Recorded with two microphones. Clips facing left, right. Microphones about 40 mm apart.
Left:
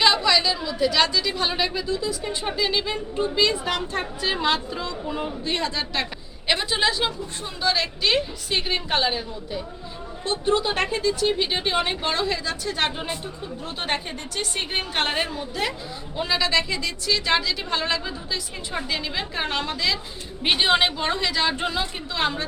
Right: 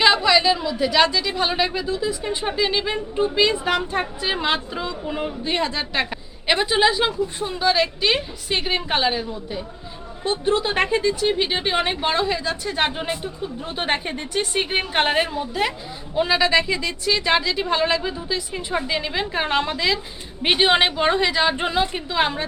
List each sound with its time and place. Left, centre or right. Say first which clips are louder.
0.0 s chatter: right 3 dB; centre
0.7 s a woman's voice: left 1 dB; centre